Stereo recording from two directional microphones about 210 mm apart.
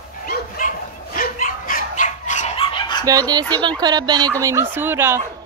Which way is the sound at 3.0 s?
20° right (ahead or behind).